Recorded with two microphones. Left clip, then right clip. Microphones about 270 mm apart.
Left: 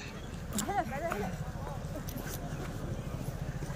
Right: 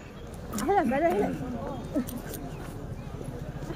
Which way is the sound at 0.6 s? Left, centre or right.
Right.